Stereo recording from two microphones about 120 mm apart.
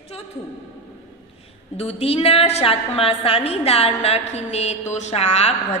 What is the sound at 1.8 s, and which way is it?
A woman's voice, 60° left (ahead or behind).